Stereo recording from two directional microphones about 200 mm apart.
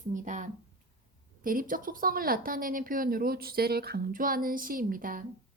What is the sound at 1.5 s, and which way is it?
A woman's voice, 45° right (ahead or behind).